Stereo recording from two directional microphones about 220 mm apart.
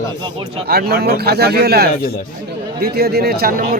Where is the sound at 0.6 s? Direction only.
45° right (ahead or behind).